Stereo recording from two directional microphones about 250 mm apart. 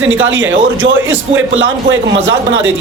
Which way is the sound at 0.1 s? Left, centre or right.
Right.